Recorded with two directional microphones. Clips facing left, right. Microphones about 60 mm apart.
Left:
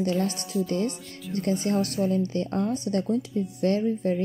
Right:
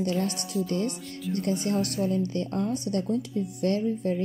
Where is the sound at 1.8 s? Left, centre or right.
Left.